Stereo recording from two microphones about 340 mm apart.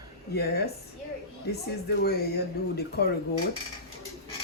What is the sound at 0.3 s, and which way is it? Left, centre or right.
Speech, left.